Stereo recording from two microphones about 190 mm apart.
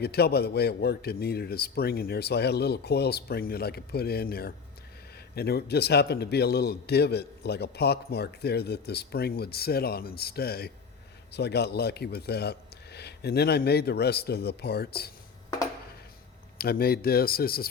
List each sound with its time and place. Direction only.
0.0 s a man's voice: 55° left (ahead or behind)
16.6 s speech: 55° left (ahead or behind)